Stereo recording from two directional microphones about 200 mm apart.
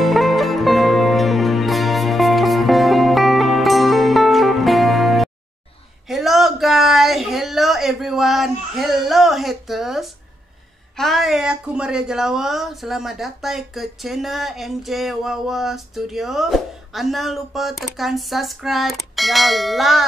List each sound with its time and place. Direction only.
0.0 s music: centre (ahead or behind)
6.0 s a sound: centre (ahead or behind)
11.0 s speech: centre (ahead or behind)